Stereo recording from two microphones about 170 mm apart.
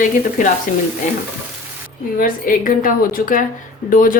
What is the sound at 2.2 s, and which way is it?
A woman's voice, 55° left (ahead or behind).